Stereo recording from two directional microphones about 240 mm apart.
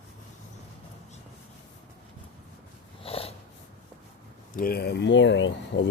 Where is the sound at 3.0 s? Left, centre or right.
Left.